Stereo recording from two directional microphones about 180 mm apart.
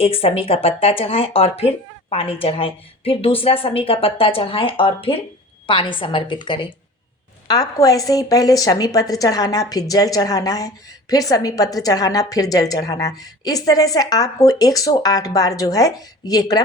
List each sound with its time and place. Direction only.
0.0 s a woman's voice: 30° left (ahead or behind)